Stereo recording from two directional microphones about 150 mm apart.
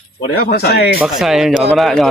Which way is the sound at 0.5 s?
90° left.